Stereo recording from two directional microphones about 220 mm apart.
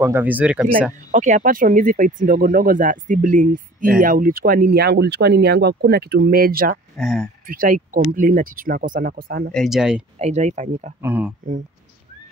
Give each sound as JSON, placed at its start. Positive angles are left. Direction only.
{"t": 0.0, "sound": "speech", "side_deg": -10}
{"t": 1.1, "sound": "speech", "side_deg": -35}
{"t": 7.0, "sound": "speech", "side_deg": 0}
{"t": 7.4, "sound": "speech", "side_deg": -40}
{"t": 9.5, "sound": "speech", "side_deg": 0}
{"t": 10.1, "sound": "speech", "side_deg": -30}
{"t": 11.0, "sound": "speech", "side_deg": -10}